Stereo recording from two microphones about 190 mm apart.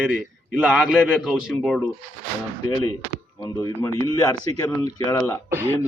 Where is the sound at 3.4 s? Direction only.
20° left (ahead or behind).